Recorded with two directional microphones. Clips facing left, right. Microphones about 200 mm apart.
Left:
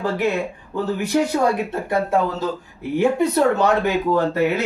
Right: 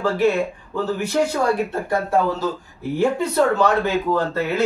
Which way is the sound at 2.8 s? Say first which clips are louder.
Left 2 dB; 20° left (ahead or behind).